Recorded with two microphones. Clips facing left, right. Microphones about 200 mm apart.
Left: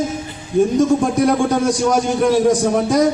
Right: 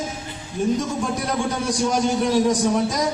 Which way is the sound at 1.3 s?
55° left (ahead or behind).